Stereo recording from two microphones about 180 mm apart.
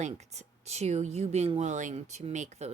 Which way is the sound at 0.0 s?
40° right (ahead or behind).